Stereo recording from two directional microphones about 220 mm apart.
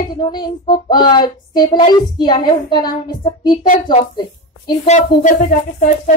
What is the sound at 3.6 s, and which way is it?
Speech, 35° left (ahead or behind).